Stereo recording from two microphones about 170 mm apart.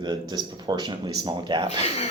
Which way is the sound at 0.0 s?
25° right (ahead or behind).